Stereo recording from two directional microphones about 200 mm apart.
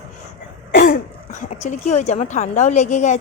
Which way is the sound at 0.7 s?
45° left (ahead or behind).